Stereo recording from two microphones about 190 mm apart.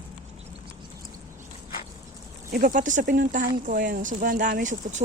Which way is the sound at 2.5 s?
50° right (ahead or behind).